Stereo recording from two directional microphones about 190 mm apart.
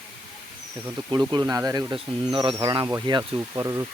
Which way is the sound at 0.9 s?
20° right (ahead or behind).